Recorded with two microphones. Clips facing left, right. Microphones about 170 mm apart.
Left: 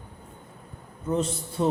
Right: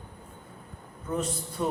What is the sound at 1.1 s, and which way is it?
Speech, 25° left (ahead or behind).